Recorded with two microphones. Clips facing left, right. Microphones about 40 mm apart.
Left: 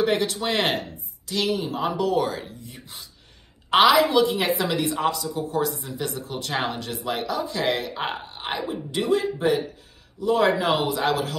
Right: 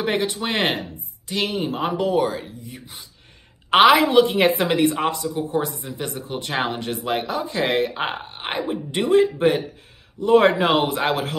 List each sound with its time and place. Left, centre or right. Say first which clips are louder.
0.0 s speech: even; centre
1.3 s a woman's voice: right 1 dB; right
2.1 s speech: right 3 dB; centre
3.7 s a woman's voice: right 3 dB; right